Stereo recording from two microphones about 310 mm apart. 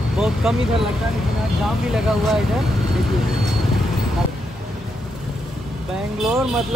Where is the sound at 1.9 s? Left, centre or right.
Centre.